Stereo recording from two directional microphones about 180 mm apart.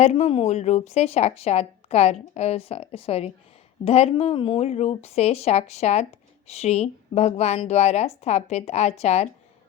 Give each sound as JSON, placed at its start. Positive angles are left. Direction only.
{"t": 0.0, "sound": "a woman's voice", "side_deg": 35}